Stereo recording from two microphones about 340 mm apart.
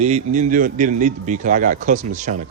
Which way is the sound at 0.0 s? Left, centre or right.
Centre.